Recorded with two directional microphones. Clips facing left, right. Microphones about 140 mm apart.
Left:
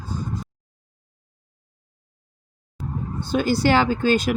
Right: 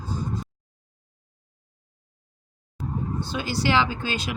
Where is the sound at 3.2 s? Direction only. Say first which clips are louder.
Left 8 dB; 50° left (ahead or behind).